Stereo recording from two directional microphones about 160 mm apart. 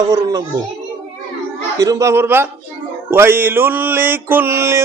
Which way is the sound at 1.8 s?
20° right (ahead or behind).